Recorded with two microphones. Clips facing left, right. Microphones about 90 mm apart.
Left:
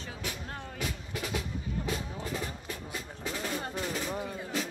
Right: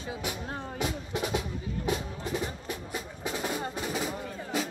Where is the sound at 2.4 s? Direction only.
20° right (ahead or behind).